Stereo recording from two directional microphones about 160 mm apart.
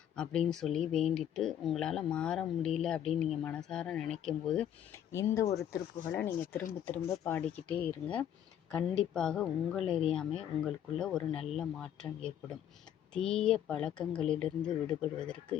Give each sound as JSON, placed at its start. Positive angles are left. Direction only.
{"t": 0.2, "sound": "speech", "side_deg": 5}
{"t": 5.1, "sound": "speech", "side_deg": 20}
{"t": 6.1, "sound": "speech", "side_deg": 10}